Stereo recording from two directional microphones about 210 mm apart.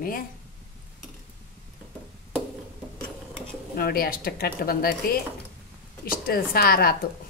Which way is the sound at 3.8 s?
45° left (ahead or behind).